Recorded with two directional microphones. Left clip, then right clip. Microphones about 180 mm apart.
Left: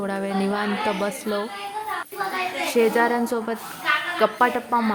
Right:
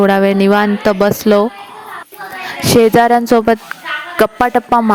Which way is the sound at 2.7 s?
55° right (ahead or behind).